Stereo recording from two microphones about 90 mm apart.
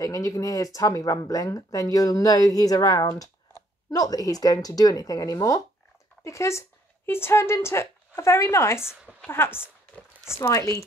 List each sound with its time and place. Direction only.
0.0 s a woman's voice: 40° left (ahead or behind)